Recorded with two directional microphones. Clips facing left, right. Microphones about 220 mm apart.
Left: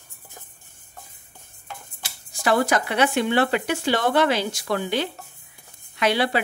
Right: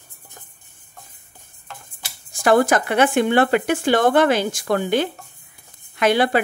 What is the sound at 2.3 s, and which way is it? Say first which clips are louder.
Speech: right 5 dB; 50° right (ahead or behind).